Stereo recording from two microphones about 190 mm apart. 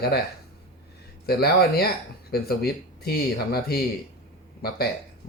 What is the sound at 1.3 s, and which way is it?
Speech, 55° left (ahead or behind).